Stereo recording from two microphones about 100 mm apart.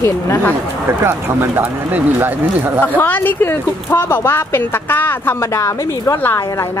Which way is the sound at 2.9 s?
20° left (ahead or behind).